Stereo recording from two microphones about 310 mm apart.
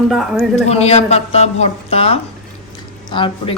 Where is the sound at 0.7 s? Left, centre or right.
Left.